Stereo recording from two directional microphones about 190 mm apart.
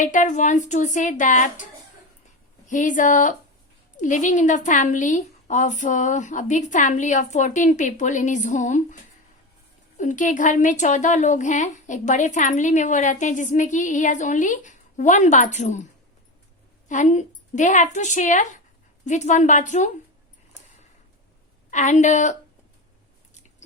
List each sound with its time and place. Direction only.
0.0 s a woman's voice: 40° left (ahead or behind)
2.6 s a woman's voice: 40° left (ahead or behind)
10.0 s a woman's voice: 40° left (ahead or behind)
16.9 s a woman's voice: 40° left (ahead or behind)
21.7 s a woman's voice: 40° left (ahead or behind)